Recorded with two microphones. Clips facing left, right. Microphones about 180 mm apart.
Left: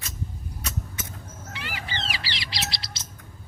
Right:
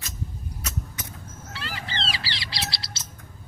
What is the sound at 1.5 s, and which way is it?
Bird, 15° left (ahead or behind).